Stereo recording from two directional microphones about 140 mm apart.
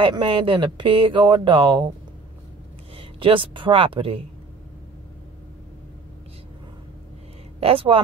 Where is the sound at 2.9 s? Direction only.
40° right (ahead or behind).